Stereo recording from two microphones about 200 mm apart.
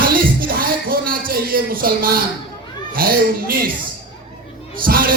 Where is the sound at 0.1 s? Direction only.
45° right (ahead or behind).